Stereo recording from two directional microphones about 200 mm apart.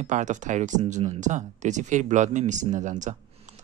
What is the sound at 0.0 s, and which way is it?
Speech, 40° right (ahead or behind).